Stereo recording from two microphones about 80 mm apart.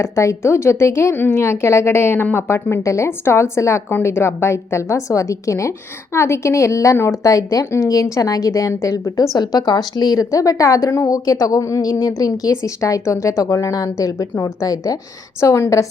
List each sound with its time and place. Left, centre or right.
0.0 s a woman's voice: left